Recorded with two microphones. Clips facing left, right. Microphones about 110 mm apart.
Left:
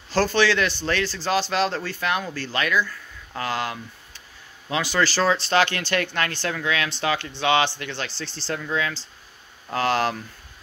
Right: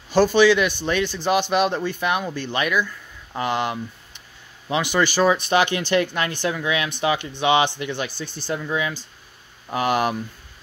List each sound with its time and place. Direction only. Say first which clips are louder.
0.1 s speech: right 5 dB; 15° right (ahead or behind)